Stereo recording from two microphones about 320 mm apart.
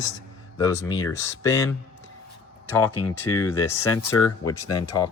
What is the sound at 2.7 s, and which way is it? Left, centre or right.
Speech, centre.